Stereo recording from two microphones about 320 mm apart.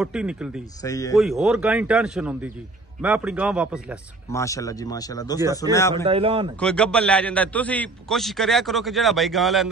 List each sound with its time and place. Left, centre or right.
0.0 s a man's voice: centre
0.8 s speech: centre
1.1 s a man's voice: centre
4.3 s speech: centre
6.0 s a man's voice: centre
6.6 s a man's voice: centre